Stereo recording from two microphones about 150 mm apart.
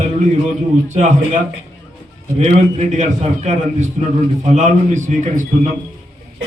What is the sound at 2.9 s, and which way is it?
A man's voice, 50° right (ahead or behind).